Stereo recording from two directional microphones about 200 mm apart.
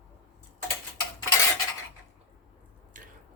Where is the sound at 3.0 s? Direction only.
40° right (ahead or behind).